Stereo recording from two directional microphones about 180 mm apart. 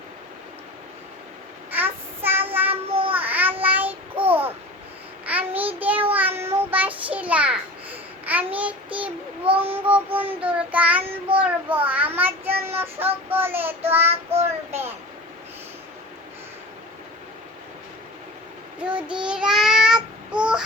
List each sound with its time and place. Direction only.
1.7 s child singing: 10° right (ahead or behind)
4.3 s babbling: 10° right (ahead or behind)
5.2 s child singing: 10° right (ahead or behind)
8.9 s child singing: 30° right (ahead or behind)
9.7 s child singing: 10° right (ahead or behind)
14.1 s child singing: 35° right (ahead or behind)
14.4 s a sound: 10° right (ahead or behind)
19.2 s child singing: 5° right (ahead or behind)